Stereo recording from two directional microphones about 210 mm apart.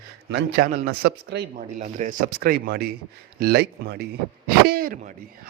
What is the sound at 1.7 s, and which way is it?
Speech, 35° right (ahead or behind).